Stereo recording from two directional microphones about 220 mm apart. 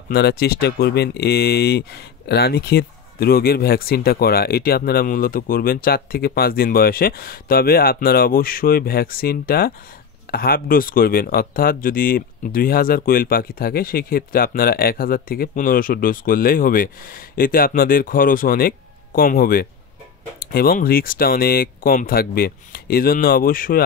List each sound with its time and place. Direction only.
0.1 s speech: 45° left (ahead or behind)